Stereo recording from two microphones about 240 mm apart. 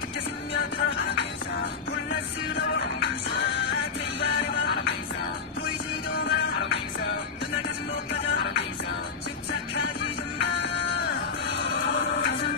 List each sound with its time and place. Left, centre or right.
2.5 s music: left
6.2 s music: left
8.1 s music: left
10.4 s music: left